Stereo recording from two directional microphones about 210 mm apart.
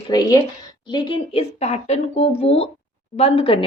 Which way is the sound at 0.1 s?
15° left (ahead or behind).